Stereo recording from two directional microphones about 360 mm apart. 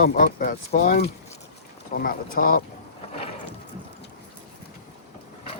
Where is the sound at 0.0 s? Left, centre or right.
Left.